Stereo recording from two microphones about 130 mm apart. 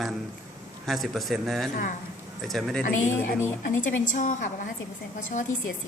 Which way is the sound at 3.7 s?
75° left (ahead or behind).